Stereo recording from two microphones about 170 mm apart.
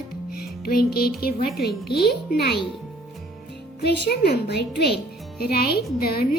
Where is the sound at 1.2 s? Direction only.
65° left (ahead or behind).